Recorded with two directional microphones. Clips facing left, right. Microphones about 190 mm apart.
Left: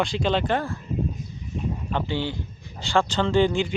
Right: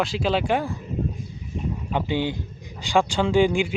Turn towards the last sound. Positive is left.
turn(degrees=-10)  # may be behind; listen again after turning